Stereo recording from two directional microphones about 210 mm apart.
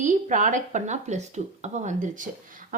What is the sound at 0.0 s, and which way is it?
A woman's voice, 35° right (ahead or behind).